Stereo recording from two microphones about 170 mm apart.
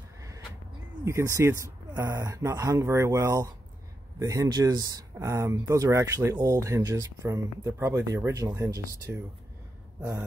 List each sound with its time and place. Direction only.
1.0 s speech: 15° right (ahead or behind)